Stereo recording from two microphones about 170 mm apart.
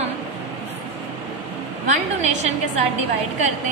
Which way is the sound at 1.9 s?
40° right (ahead or behind).